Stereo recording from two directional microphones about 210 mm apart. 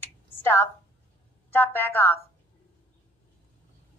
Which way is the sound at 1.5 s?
10° left (ahead or behind).